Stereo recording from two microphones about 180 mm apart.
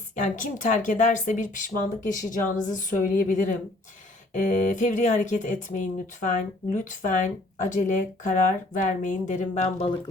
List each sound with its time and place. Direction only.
0.2 s speech: 45° left (ahead or behind)